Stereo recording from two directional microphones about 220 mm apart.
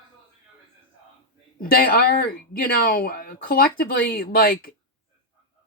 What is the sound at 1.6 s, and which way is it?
Speech, 40° left (ahead or behind).